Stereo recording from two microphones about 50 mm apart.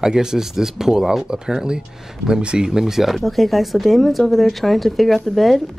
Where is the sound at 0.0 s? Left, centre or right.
Centre.